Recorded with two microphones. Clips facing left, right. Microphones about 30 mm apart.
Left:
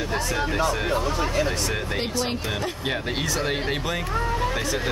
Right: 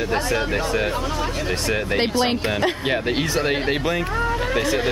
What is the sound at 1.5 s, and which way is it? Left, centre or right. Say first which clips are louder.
Speech: right 5 dB; right.